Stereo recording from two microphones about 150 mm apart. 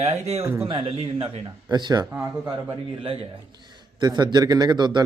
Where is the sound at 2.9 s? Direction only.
35° right (ahead or behind).